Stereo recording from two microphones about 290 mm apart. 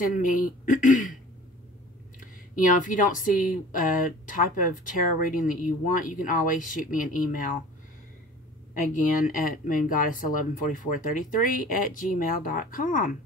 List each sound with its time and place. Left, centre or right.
0.0 s speech: left
2.1 s speech: left
8.9 s speech: left